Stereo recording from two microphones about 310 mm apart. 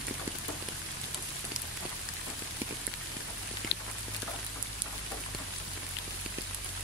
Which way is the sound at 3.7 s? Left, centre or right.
Left.